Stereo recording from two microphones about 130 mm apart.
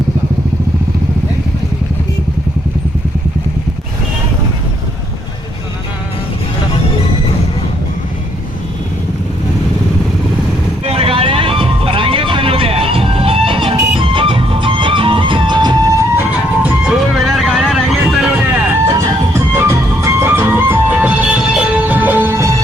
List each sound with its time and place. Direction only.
10.8 s vehicle: 45° right (ahead or behind)
14.0 s music: 40° right (ahead or behind)
17.2 s vehicle: centre (ahead or behind)
18.9 s music: 25° right (ahead or behind)